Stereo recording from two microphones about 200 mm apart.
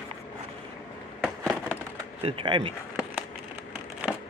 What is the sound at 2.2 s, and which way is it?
Speech, 25° right (ahead or behind).